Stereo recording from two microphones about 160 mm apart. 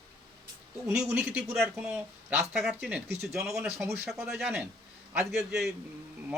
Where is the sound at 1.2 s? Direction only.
5° right (ahead or behind).